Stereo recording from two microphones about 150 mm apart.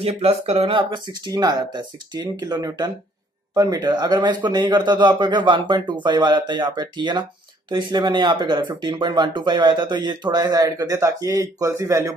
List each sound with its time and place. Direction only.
0.0 s speech: 45° right (ahead or behind); by 12.1 s 20° right (ahead or behind)